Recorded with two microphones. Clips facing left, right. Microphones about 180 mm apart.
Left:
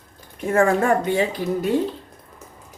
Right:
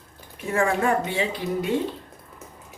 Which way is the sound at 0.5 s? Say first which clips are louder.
Left 4 dB; 45° left (ahead or behind).